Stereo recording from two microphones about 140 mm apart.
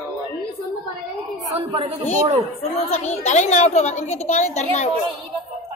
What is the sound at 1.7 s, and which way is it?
Speech, 45° right (ahead or behind).